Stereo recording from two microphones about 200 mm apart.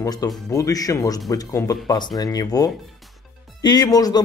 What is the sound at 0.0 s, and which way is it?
A man's voice, 15° left (ahead or behind).